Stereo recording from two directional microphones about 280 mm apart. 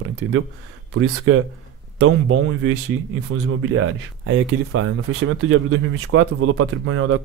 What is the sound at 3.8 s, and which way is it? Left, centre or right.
Speech, right.